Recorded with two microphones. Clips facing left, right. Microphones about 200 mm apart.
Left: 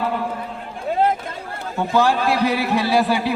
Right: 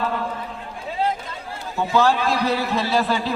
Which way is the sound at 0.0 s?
15° left (ahead or behind).